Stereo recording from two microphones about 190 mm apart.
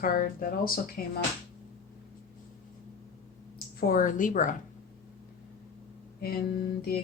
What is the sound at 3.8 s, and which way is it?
Speech, 50° left (ahead or behind).